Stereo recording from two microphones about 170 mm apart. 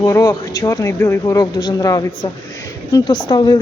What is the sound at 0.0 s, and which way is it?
Speech, 20° left (ahead or behind).